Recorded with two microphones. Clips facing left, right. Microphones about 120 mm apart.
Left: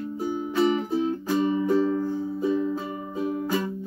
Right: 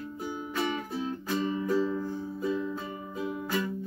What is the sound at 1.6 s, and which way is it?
Music, 50° left (ahead or behind).